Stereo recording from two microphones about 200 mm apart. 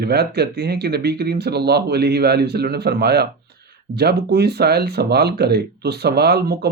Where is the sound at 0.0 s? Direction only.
55° right (ahead or behind).